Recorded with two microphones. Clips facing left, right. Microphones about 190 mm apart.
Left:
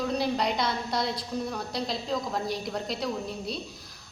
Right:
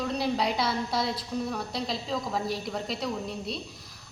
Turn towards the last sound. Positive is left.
turn(degrees=0)  # may be behind; listen again after turning